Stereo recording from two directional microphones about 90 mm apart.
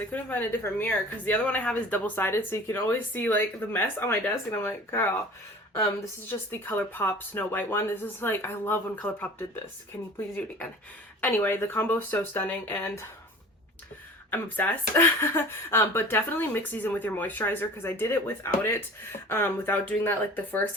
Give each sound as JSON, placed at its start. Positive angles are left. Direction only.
{"t": 0.1, "sound": "speech", "side_deg": 20}
{"t": 6.3, "sound": "speech", "side_deg": 20}
{"t": 10.2, "sound": "speech", "side_deg": 25}
{"t": 14.3, "sound": "speech", "side_deg": 20}